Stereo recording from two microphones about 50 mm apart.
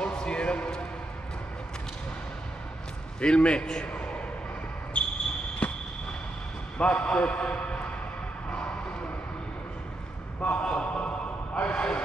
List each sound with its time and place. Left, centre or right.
0.0 s music: centre
3.2 s a man's voice: centre
4.9 s basketball bounce: left
5.6 s a sound: left
6.8 s a man's voice: left
8.5 s music: left
10.6 s a man's voice: centre